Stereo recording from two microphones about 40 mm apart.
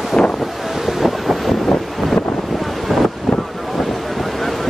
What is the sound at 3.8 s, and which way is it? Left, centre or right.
Vehicle, centre.